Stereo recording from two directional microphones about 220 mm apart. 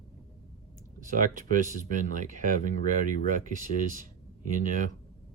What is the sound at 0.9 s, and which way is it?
Speech, 35° right (ahead or behind).